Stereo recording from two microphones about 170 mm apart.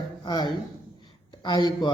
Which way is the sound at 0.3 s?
25° left (ahead or behind).